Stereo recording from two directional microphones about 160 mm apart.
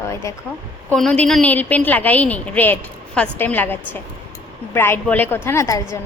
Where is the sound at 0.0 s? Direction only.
20° left (ahead or behind).